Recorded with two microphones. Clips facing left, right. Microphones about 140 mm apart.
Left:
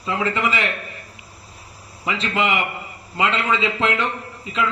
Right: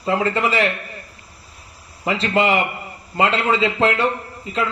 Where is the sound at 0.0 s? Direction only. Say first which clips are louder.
Right 3 dB; 40° right (ahead or behind).